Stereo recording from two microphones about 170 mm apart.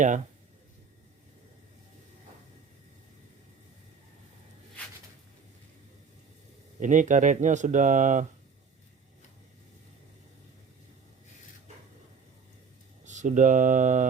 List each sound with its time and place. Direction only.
6.7 s speech: 45° right (ahead or behind)
13.1 s speech: 45° right (ahead or behind)